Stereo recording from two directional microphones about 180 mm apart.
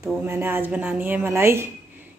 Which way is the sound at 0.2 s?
10° right (ahead or behind).